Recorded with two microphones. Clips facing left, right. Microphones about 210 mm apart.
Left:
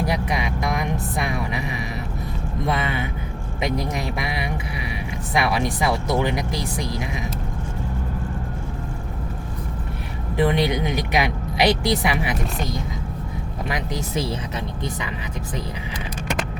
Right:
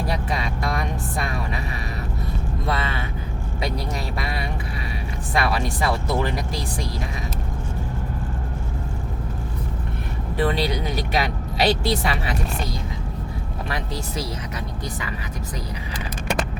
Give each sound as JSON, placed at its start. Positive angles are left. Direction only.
{"t": 0.0, "sound": "music", "side_deg": 15}
{"t": 2.6, "sound": "a sound", "side_deg": 20}
{"t": 5.3, "sound": "speech", "side_deg": 15}
{"t": 10.3, "sound": "speech", "side_deg": 20}
{"t": 13.7, "sound": "speech", "side_deg": 15}